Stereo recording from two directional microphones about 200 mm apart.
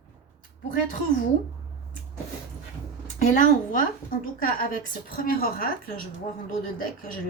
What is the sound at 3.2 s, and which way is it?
A woman's voice, 40° left (ahead or behind).